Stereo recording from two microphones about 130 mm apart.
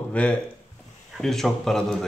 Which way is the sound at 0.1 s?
10° left (ahead or behind).